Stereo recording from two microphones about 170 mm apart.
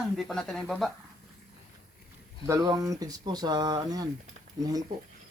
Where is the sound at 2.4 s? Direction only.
20° right (ahead or behind).